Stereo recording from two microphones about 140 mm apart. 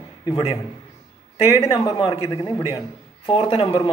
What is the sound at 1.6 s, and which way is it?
Speech, 45° left (ahead or behind).